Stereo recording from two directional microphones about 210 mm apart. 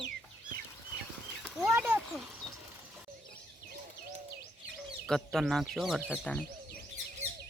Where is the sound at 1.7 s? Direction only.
10° right (ahead or behind).